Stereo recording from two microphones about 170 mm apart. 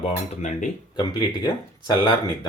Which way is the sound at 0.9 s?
25° left (ahead or behind).